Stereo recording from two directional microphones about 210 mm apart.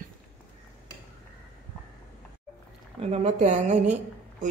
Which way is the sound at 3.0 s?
30° right (ahead or behind).